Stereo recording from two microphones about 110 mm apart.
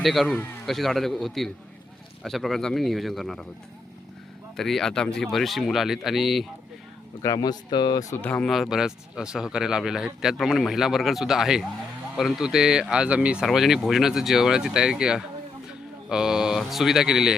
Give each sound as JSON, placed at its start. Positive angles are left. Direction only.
{"t": 0.0, "sound": "speech", "side_deg": 0}
{"t": 0.3, "sound": "a man's voice", "side_deg": 20}
{"t": 0.6, "sound": "speech", "side_deg": 0}
{"t": 4.5, "sound": "speech", "side_deg": 5}
{"t": 7.2, "sound": "speech", "side_deg": 35}
{"t": 8.1, "sound": "speech", "side_deg": 15}
{"t": 8.4, "sound": "speech", "side_deg": 0}